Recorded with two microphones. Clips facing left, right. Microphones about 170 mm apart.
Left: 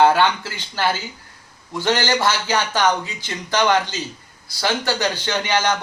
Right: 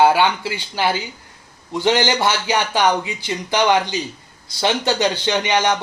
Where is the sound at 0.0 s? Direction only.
10° right (ahead or behind).